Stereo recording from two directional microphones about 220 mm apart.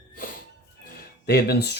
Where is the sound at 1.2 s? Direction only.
45° left (ahead or behind).